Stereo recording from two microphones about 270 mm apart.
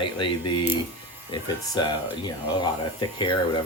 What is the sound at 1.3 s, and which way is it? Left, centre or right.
Speech, centre.